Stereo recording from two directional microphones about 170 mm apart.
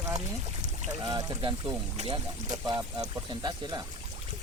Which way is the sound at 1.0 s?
25° right (ahead or behind).